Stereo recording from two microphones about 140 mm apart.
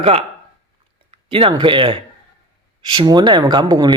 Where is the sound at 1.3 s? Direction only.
35° right (ahead or behind).